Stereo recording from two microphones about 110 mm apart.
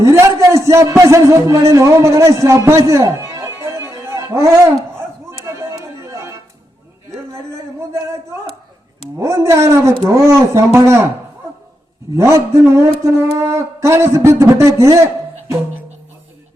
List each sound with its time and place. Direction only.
0.0 s a man's voice: 25° right (ahead or behind)
5.5 s music: 25° right (ahead or behind)
9.1 s speech: 25° right (ahead or behind)
12.1 s speech: 25° right (ahead or behind)